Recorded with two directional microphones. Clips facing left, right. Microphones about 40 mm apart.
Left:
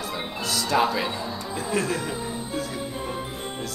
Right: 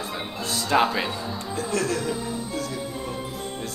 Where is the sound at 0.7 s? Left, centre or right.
Right.